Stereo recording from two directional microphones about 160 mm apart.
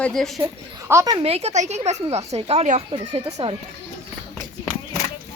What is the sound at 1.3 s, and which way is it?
A woman's voice, 40° right (ahead or behind).